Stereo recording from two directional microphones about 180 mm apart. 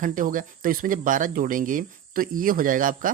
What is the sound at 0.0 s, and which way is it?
Speech, 45° right (ahead or behind).